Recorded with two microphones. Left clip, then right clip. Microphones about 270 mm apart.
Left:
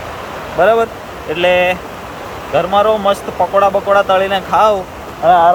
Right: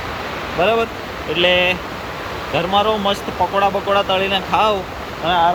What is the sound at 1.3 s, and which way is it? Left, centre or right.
Speech, centre.